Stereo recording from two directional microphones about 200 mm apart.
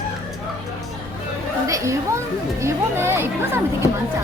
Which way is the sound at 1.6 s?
15° right (ahead or behind).